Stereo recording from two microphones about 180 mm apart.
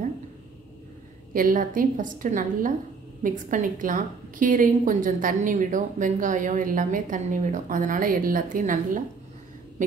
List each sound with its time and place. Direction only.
1.3 s a woman's voice: 50° right (ahead or behind)